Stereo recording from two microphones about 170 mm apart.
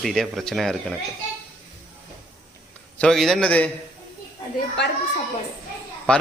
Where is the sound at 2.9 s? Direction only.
5° left (ahead or behind).